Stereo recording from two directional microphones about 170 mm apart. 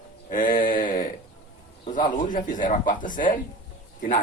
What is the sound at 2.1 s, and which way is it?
Speech, 50° left (ahead or behind).